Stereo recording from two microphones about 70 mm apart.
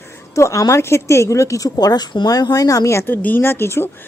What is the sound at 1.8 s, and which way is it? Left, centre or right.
Speech, left.